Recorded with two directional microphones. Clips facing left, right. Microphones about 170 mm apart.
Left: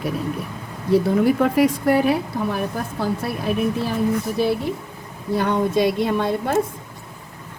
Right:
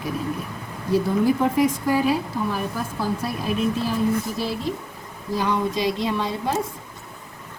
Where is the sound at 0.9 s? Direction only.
65° left (ahead or behind).